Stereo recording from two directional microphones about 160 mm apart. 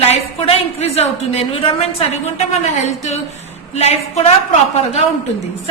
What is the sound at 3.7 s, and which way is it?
A woman's voice, 40° left (ahead or behind).